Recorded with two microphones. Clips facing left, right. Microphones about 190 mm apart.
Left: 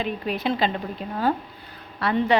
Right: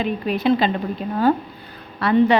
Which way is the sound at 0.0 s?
60° right (ahead or behind).